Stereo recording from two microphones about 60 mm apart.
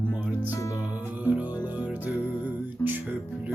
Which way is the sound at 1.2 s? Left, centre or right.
Right.